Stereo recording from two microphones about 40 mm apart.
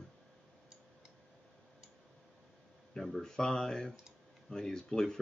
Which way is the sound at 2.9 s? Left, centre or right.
Centre.